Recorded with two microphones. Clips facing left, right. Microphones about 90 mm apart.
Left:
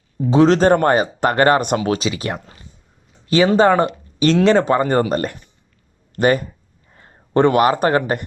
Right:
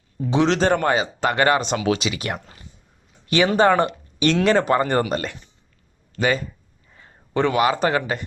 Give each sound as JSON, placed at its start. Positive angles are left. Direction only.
{"t": 0.3, "sound": "speech", "side_deg": 40}
{"t": 5.0, "sound": "speech", "side_deg": 40}
{"t": 6.1, "sound": "speech", "side_deg": 55}
{"t": 6.9, "sound": "a sound", "side_deg": 35}
{"t": 7.3, "sound": "speech", "side_deg": 50}